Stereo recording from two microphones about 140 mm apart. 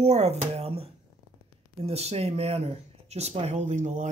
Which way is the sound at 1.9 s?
50° right (ahead or behind).